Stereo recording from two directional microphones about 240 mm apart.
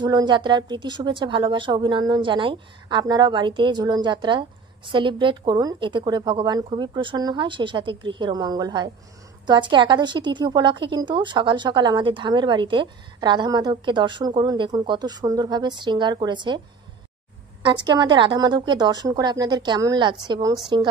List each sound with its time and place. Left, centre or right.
0.0 s a woman's voice: centre
17.6 s a woman's voice: centre